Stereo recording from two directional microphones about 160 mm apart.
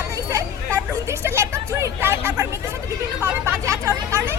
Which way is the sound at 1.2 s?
15° right (ahead or behind).